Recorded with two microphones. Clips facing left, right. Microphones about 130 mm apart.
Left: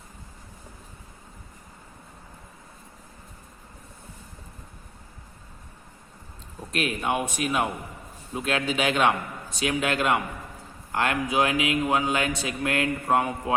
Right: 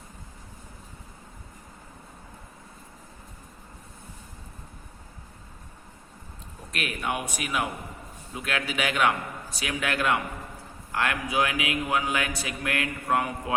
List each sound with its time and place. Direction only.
6.7 s a man's voice: 25° left (ahead or behind)